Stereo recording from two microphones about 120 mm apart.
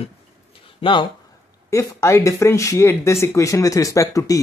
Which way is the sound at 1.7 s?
25° left (ahead or behind).